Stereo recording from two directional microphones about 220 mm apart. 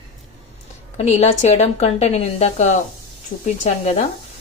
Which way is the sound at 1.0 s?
30° left (ahead or behind).